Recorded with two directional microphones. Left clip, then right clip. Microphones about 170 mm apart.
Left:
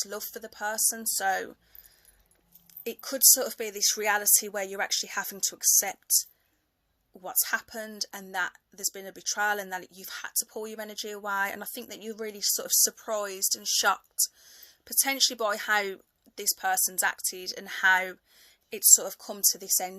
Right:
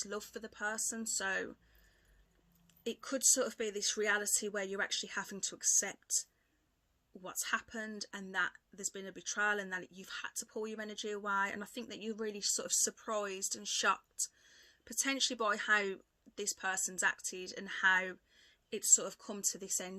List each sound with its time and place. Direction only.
0.0 s speech: 30° right (ahead or behind)
3.0 s speech: 25° right (ahead or behind)